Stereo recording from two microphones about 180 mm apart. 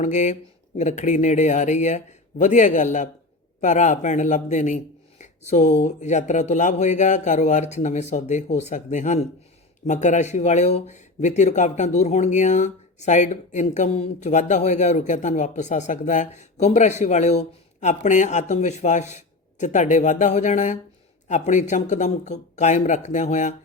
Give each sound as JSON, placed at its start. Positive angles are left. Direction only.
{"t": 0.0, "sound": "a man's voice", "side_deg": 40}